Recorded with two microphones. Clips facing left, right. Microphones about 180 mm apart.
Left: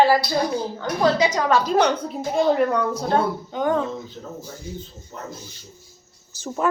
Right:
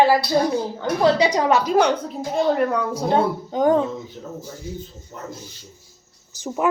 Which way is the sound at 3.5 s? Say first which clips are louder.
Right 6 dB; 35° right (ahead or behind).